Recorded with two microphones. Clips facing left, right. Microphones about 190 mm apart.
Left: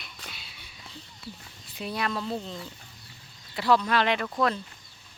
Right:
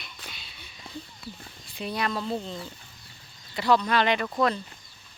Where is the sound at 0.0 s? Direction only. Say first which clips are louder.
Even; centre (ahead or behind).